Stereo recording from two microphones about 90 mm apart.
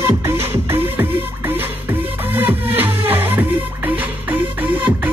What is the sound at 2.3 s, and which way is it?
Music, 20° right (ahead or behind).